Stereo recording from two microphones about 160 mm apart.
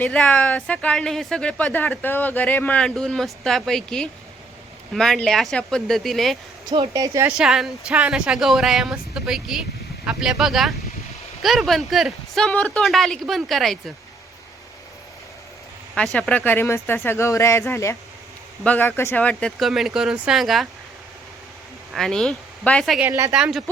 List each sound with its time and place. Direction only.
0.0 s speech: 10° left (ahead or behind)
6.9 s a woman's voice: 20° right (ahead or behind)
7.3 s speech: 5° right (ahead or behind)
16.1 s speech: 5° left (ahead or behind)
21.9 s speech: centre (ahead or behind)
23.0 s speech: 20° right (ahead or behind)
23.3 s speech: 5° right (ahead or behind)